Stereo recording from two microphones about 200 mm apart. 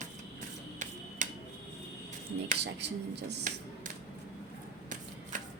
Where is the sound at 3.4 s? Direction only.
40° right (ahead or behind).